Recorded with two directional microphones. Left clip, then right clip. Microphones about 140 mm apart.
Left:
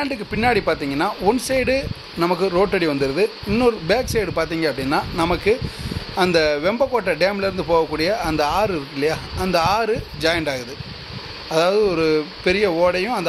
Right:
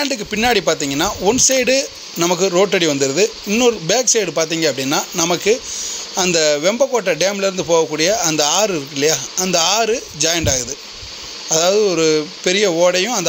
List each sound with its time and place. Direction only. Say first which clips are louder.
0.0 s speech: right 3 dB; 40° right (ahead or behind)